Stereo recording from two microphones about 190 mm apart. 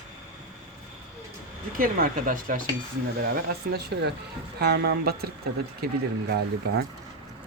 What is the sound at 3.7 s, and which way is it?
Speech, 55° right (ahead or behind).